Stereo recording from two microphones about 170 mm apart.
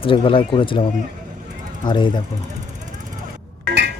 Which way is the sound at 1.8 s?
25° left (ahead or behind).